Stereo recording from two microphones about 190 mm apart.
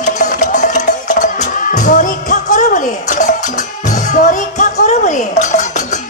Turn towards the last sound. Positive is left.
turn(degrees=40)  # may be behind; listen again after turning